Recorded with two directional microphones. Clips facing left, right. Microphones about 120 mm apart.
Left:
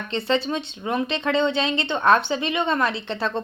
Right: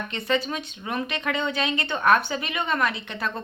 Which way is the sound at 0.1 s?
30° left (ahead or behind).